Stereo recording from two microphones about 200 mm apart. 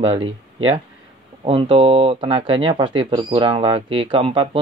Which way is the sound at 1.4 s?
25° right (ahead or behind).